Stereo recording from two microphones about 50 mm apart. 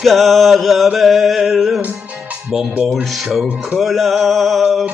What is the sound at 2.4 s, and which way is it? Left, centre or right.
Speech, right.